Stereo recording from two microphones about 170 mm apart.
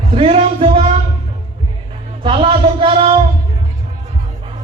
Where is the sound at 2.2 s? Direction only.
30° right (ahead or behind).